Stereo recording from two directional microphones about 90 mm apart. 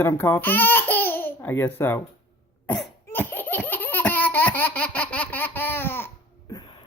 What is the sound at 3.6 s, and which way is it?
Baby laughter, 20° left (ahead or behind).